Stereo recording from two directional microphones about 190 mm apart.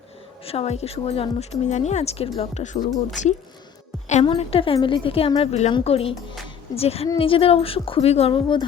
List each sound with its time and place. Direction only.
0.4 s a woman's voice: 30° left (ahead or behind)